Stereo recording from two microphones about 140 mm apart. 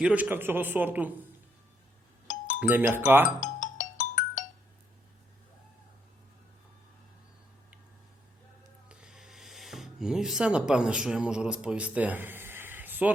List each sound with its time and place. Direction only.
0.0 s speech: 10° right (ahead or behind)
2.2 s doorbell: 65° left (ahead or behind)
2.6 s speech: 15° right (ahead or behind)
3.2 s music: 65° left (ahead or behind)
8.9 s a sound: 5° right (ahead or behind)